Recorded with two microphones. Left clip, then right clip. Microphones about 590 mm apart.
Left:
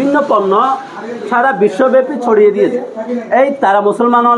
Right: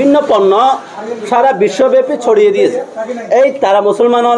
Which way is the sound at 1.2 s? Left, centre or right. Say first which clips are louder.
Right 1 dB; right.